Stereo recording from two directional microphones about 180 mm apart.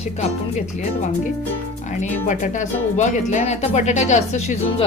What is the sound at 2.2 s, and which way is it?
A woman's voice, 45° left (ahead or behind).